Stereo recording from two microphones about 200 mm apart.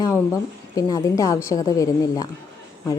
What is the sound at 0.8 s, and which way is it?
A woman's voice, 15° left (ahead or behind).